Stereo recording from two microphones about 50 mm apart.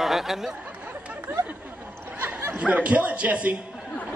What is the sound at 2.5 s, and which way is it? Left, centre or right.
Speech, right.